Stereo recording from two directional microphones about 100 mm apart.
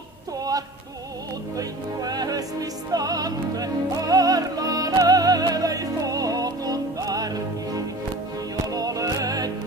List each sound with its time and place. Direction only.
1.6 s opera: 40° right (ahead or behind)
8.7 s music: 40° right (ahead or behind)